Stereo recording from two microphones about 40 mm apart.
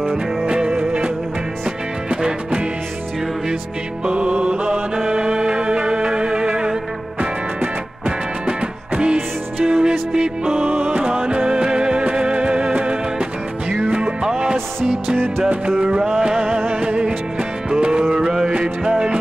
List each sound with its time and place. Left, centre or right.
0.5 s music: right
4.0 s mantra: right
4.9 s music: centre
8.5 s music: right